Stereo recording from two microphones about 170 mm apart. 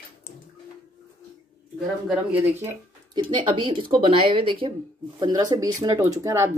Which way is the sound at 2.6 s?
25° right (ahead or behind).